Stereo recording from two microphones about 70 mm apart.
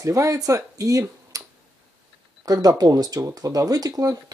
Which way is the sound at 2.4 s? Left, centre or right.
Right.